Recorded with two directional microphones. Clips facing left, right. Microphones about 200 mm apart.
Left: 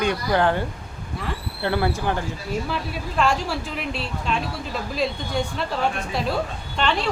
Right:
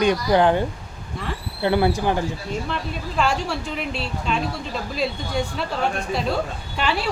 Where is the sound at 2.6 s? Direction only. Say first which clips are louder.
Even; 5° left (ahead or behind).